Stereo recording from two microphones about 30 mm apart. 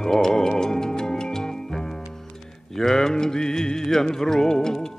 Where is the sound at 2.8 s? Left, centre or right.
Centre.